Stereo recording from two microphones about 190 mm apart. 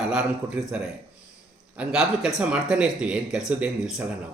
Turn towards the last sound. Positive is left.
turn(degrees=-5)  # may be behind; listen again after turning